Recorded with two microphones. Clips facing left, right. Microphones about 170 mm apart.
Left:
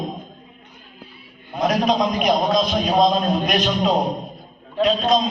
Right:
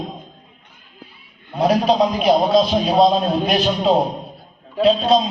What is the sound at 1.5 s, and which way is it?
A man's voice, 30° right (ahead or behind).